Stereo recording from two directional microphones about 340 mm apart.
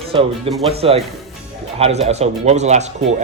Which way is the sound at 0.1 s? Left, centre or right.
Centre.